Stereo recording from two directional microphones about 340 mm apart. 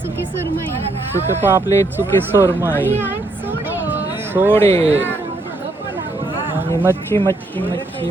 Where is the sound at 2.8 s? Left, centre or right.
Centre.